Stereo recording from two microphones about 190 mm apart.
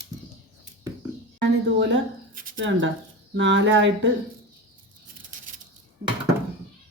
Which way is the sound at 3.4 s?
75° right (ahead or behind).